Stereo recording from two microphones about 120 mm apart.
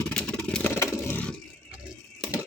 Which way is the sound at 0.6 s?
25° left (ahead or behind).